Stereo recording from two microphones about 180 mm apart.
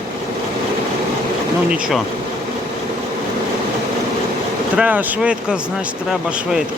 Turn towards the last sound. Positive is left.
turn(degrees=-5)  # may be behind; listen again after turning